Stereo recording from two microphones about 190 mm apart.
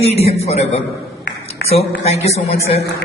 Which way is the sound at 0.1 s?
35° left (ahead or behind).